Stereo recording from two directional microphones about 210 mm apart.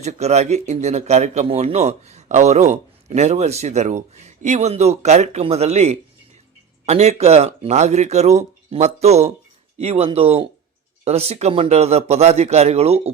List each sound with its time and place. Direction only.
0.0 s speech: 30° right (ahead or behind)